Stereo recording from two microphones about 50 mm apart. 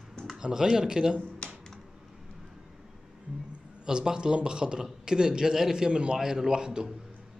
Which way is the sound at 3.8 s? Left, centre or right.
Centre.